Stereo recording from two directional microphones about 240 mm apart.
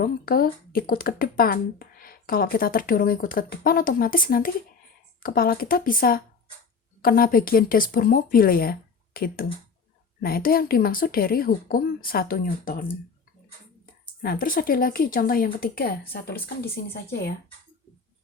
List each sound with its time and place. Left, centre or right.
0.0 s speech: left
14.2 s speech: left